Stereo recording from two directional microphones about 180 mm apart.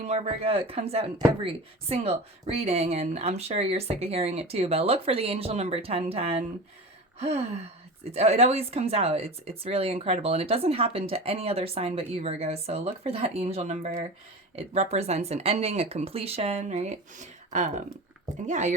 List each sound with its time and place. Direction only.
0.0 s speech: 35° right (ahead or behind)